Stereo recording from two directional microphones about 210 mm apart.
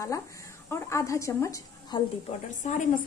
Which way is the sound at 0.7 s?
15° left (ahead or behind).